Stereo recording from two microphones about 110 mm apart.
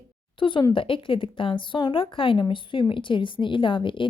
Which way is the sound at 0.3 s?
50° left (ahead or behind).